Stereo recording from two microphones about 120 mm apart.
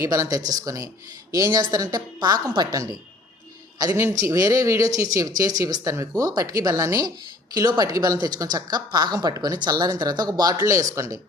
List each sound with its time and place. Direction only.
0.0 s speech: 30° right (ahead or behind)
4.2 s speech: 30° right (ahead or behind)